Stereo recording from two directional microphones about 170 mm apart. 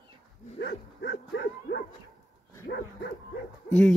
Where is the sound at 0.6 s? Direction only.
85° left.